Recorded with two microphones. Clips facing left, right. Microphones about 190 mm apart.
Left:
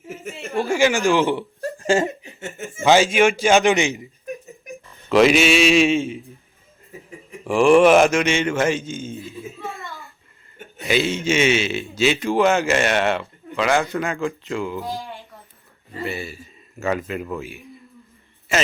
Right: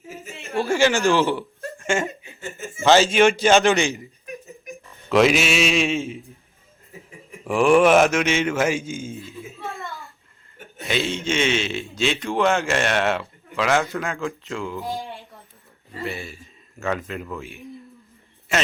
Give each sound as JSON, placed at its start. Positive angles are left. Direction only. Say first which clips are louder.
{"t": 0.3, "sound": "a sound", "louder": "left 1 dB", "side_deg": 0}
{"t": 0.6, "sound": "a man's voice", "louder": "left 1 dB", "side_deg": 15}
{"t": 1.6, "sound": "laughter", "louder": "left 5 dB", "side_deg": 35}
{"t": 2.8, "sound": "a man's voice", "louder": "even", "side_deg": 10}
{"t": 5.0, "sound": "a man's voice", "louder": "left 3 dB", "side_deg": 0}
{"t": 7.4, "sound": "a man's voice", "louder": "left 3 dB", "side_deg": 0}
{"t": 9.4, "sound": "a sound", "louder": "left 1 dB", "side_deg": 0}
{"t": 10.8, "sound": "a man's voice", "louder": "left 4 dB", "side_deg": 5}